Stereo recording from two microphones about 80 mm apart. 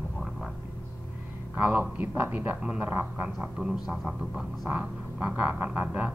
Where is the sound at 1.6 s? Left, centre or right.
Centre.